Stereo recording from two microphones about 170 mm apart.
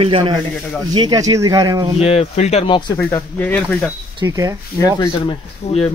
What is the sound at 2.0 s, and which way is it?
Speech, 40° left (ahead or behind).